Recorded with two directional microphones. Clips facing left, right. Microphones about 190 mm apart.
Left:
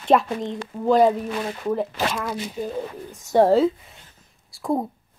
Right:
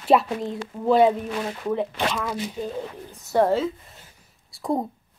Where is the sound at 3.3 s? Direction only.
35° left (ahead or behind).